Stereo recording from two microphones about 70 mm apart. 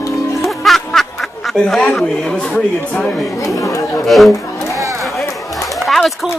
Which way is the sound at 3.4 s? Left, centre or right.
Left.